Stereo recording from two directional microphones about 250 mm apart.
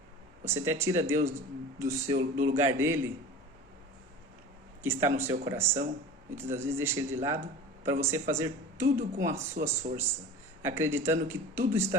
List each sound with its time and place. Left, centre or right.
0.4 s speech: centre
2.1 s speech: right
2.6 s speech: centre
4.8 s speech: centre
9.0 s speech: right
10.6 s speech: centre